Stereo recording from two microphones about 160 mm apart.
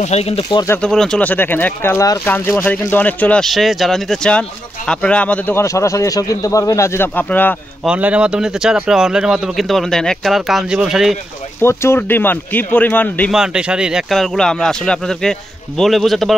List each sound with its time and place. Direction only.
0.0 s speech: 40° left (ahead or behind)
0.4 s speech: 25° left (ahead or behind)
0.7 s speech: 5° left (ahead or behind)
7.8 s speech: 5° right (ahead or behind)
11.6 s speech: 15° left (ahead or behind)
13.3 s speech: 5° right (ahead or behind)